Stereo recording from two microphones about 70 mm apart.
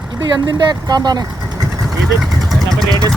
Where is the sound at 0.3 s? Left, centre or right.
Right.